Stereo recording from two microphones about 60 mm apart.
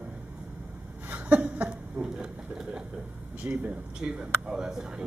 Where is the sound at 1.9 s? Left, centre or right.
Centre.